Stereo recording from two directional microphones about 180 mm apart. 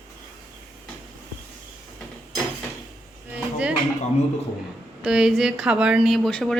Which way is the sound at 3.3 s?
5° right (ahead or behind).